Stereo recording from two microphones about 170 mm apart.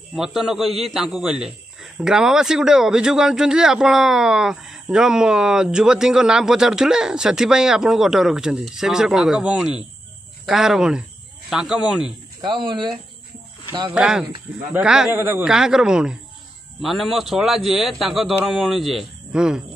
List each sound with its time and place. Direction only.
0.1 s a man's voice: centre (ahead or behind)
12.4 s speech: 30° right (ahead or behind)
13.9 s a man's voice: 5° right (ahead or behind)